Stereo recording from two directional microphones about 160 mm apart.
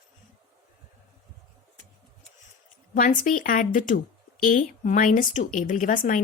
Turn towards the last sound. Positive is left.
turn(degrees=55)  # may be behind; listen again after turning